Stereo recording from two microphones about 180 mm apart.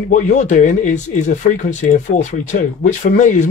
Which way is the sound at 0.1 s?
45° left (ahead or behind).